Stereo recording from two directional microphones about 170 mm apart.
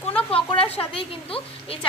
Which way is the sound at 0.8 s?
30° left (ahead or behind).